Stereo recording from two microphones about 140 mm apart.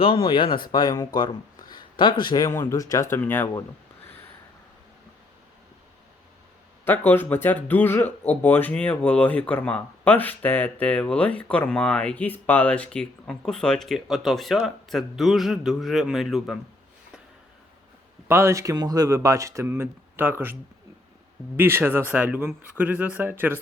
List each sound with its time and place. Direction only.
0.0 s speech: 35° left (ahead or behind); by 3.5 s 15° left (ahead or behind)
6.8 s a man's voice: 15° left (ahead or behind)
18.3 s speech: 20° right (ahead or behind)